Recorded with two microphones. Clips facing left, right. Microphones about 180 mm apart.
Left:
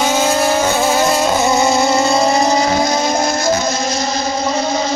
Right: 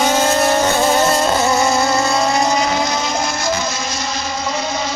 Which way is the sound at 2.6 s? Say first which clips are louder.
Left 4 dB; 40° left (ahead or behind).